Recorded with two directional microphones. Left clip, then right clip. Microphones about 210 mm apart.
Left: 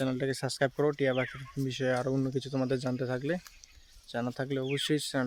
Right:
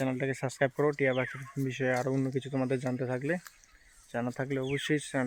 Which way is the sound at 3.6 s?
15° right (ahead or behind).